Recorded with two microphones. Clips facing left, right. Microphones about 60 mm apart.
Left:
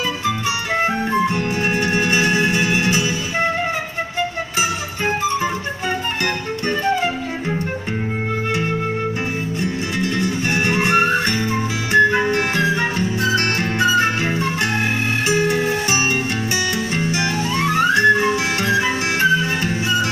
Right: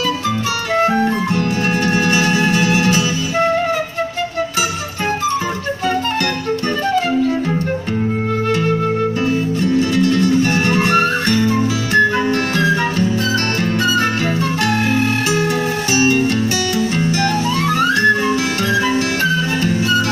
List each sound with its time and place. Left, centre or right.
1.4 s music: centre
8.5 s flute: centre
9.8 s music: centre
17.0 s music: centre